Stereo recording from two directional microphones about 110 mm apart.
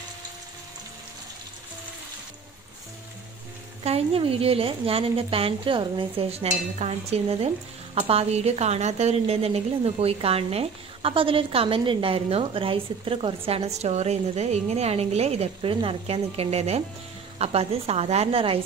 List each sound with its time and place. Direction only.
3.8 s a woman's voice: 65° right (ahead or behind)
13.5 s a woman's voice: 75° right (ahead or behind)
15.7 s a woman's voice: 55° right (ahead or behind)